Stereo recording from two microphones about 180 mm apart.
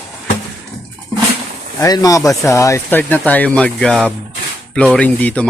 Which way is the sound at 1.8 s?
20° left (ahead or behind).